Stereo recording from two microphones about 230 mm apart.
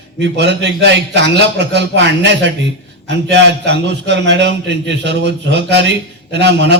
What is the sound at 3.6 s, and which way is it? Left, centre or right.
A man's voice, right.